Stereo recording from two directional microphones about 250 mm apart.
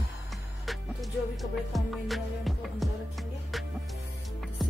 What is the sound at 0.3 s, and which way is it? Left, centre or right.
Music, centre.